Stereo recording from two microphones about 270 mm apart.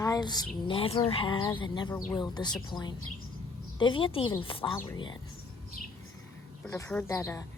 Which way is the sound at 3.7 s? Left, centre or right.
Centre.